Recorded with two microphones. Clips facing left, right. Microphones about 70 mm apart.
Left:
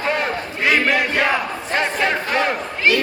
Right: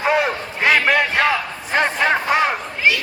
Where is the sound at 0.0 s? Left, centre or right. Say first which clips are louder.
Right 3 dB; centre.